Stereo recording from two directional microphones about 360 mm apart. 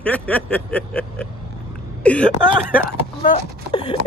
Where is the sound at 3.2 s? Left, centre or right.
Centre.